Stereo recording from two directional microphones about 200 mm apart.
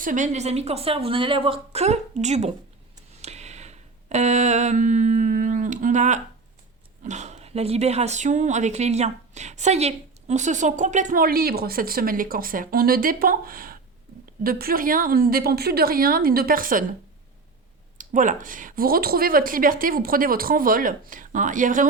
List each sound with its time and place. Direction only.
0.0 s speech: 40° right (ahead or behind)
3.2 s a sound: 35° right (ahead or behind)
7.0 s speech: 35° right (ahead or behind)
17.9 s speech: 40° right (ahead or behind)